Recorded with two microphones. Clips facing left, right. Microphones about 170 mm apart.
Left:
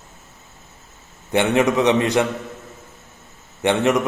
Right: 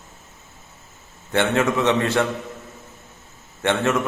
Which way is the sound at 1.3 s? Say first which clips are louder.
Left 3 dB; 15° left (ahead or behind).